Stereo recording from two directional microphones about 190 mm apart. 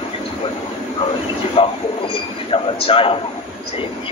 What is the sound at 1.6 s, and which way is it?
A man's voice, 25° left (ahead or behind).